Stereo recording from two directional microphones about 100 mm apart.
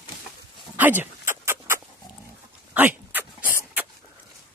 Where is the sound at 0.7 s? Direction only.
20° right (ahead or behind).